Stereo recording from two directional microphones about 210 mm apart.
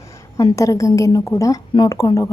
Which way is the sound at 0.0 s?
15° left (ahead or behind).